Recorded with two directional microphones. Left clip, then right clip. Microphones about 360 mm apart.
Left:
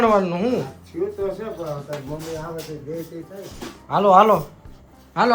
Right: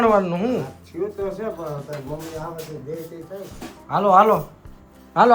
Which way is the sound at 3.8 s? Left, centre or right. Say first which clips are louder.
Left 1 dB; centre.